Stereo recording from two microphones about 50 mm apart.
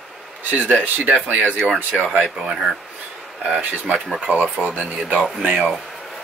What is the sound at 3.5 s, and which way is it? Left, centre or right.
Speech, right.